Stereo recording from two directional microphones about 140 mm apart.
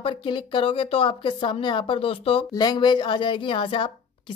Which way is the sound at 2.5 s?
30° left (ahead or behind).